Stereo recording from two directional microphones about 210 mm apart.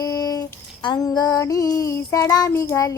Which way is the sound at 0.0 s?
15° left (ahead or behind).